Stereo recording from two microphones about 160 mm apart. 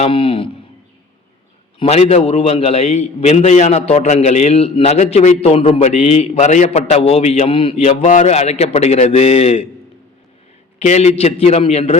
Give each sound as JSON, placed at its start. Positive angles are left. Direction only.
{"t": 0.0, "sound": "a man's voice", "side_deg": 35}
{"t": 1.8, "sound": "a man's voice", "side_deg": 40}
{"t": 10.8, "sound": "a man's voice", "side_deg": 40}